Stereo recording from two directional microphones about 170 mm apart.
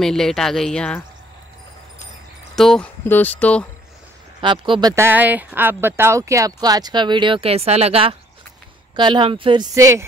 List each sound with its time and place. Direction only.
0.0 s speech: centre (ahead or behind)
2.5 s speech: 5° left (ahead or behind)
4.4 s speech: 30° right (ahead or behind)
4.9 s speech: 10° right (ahead or behind)